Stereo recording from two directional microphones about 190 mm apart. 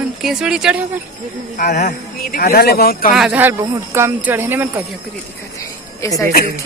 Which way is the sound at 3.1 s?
5° right (ahead or behind).